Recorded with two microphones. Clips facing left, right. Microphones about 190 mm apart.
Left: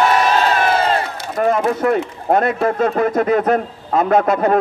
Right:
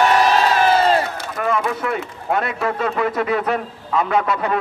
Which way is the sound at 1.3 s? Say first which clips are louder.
Left 5 dB; 40° left (ahead or behind).